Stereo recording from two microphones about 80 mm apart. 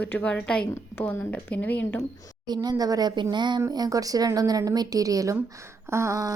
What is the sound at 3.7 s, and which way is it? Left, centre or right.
A woman's voice, right.